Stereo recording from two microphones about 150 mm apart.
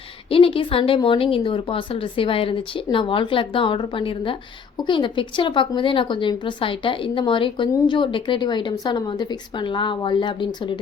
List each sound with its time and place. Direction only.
0.3 s a woman's voice: 40° left (ahead or behind)